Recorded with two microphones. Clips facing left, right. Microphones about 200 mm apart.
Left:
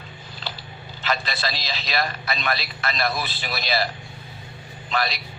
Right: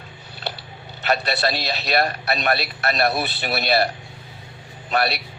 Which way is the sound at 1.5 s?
60° right (ahead or behind).